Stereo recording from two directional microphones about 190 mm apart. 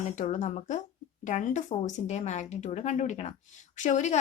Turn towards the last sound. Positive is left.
turn(degrees=40)  # may be behind; listen again after turning